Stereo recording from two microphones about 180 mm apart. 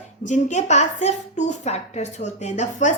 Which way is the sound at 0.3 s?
40° left (ahead or behind).